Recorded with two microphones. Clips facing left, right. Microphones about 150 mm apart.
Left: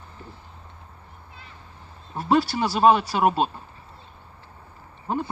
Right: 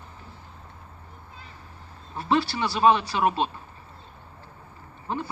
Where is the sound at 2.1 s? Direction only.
40° left (ahead or behind).